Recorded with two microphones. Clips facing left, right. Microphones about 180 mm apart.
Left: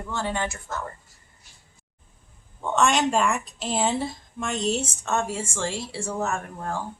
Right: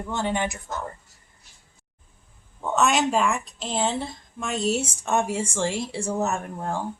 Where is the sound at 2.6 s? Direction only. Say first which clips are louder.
Even; 5° right (ahead or behind).